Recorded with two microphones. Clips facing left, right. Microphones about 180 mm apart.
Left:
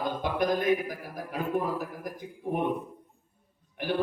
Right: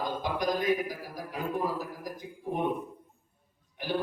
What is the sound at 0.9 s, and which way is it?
Speech, 55° left (ahead or behind).